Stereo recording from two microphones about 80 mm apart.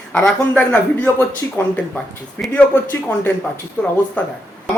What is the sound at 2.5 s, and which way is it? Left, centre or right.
Speech, left.